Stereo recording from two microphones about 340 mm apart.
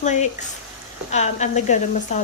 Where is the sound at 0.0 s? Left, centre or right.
Left.